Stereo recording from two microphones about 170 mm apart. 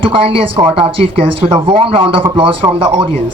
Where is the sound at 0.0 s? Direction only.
30° right (ahead or behind).